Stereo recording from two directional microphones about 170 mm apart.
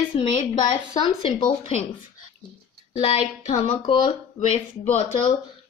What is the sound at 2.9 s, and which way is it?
A woman's voice, 40° left (ahead or behind).